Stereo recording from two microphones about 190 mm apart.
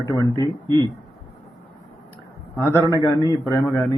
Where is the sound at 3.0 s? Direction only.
20° left (ahead or behind).